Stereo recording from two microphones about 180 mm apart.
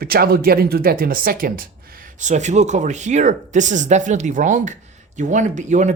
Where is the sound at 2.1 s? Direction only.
40° right (ahead or behind).